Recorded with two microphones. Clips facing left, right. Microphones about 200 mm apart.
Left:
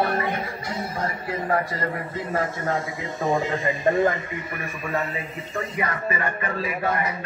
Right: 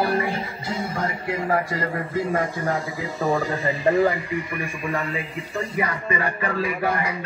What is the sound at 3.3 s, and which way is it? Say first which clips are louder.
Speech: left 1 dB; 20° left (ahead or behind).